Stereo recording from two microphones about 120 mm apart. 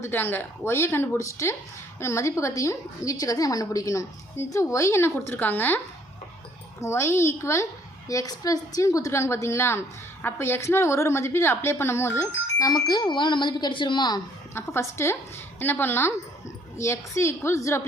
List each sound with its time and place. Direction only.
0.0 s a woman's voice: 20° left (ahead or behind)
6.8 s a woman's voice: 20° left (ahead or behind); by 14.2 s 40° left (ahead or behind)
14.5 s a woman's voice: 20° left (ahead or behind)